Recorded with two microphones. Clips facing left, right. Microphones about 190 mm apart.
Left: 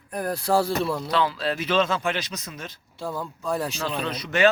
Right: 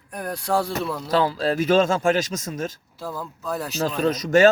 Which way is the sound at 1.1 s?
40° right (ahead or behind).